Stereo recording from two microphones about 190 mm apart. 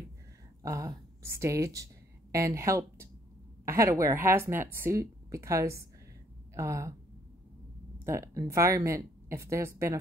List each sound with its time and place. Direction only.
0.6 s a woman's voice: 15° right (ahead or behind)
8.0 s a woman's voice: 15° right (ahead or behind)